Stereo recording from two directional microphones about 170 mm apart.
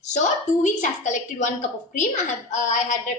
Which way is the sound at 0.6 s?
50° left (ahead or behind).